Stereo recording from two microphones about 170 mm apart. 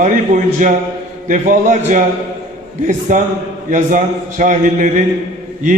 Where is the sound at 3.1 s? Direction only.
50° right (ahead or behind).